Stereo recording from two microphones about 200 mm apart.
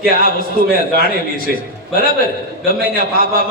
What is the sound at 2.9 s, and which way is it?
Speech, 45° right (ahead or behind).